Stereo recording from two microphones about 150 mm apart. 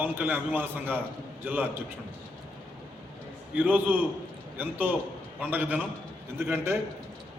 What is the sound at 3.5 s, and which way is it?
A man's voice, 10° right (ahead or behind).